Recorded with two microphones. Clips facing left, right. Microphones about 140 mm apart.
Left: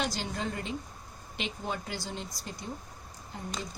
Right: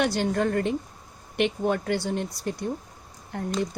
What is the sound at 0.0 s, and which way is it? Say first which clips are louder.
Speech: right 10 dB; 55° right (ahead or behind).